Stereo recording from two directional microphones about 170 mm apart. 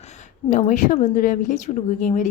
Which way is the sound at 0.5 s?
45° left (ahead or behind).